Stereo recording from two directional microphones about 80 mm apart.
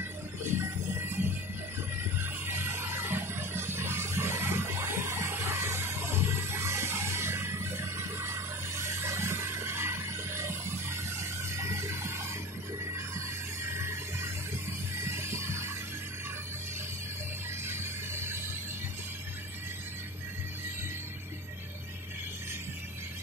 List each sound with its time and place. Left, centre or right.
0.4 s music: right
2.4 s music: right
13.7 s a sound: right
15.0 s music: right
17.6 s music: right